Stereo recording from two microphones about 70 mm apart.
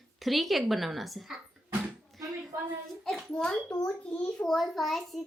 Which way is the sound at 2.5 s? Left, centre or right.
Right.